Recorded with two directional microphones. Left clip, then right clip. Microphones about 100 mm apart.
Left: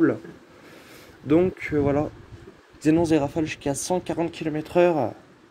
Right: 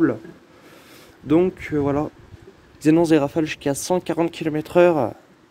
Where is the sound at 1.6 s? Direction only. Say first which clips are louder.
Right 1 dB; 50° right (ahead or behind).